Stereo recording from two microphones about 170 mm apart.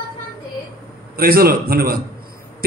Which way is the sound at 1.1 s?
60° right (ahead or behind).